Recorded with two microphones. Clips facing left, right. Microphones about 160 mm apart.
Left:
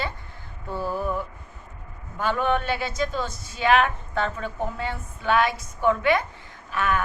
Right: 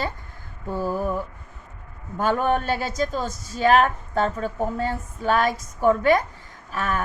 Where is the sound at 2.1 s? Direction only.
45° right (ahead or behind).